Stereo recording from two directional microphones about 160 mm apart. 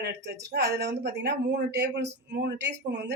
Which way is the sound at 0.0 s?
90° right.